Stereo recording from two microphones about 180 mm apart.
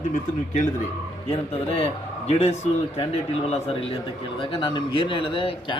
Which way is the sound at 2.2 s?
35° left (ahead or behind).